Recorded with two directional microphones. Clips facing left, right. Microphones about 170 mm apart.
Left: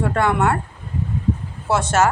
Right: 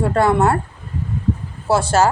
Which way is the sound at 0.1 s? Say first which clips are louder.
Right 4 dB; 35° right (ahead or behind).